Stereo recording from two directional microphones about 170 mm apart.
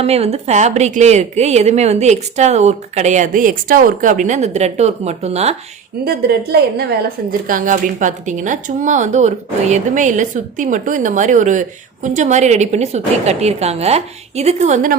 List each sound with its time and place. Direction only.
0.0 s a woman's voice: 35° right (ahead or behind)
6.1 s a woman's voice: 65° right (ahead or behind)
7.4 s a woman's voice: 50° right (ahead or behind)